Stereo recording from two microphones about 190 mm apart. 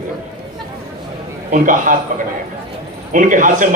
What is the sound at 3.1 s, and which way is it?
Speech, 45° right (ahead or behind).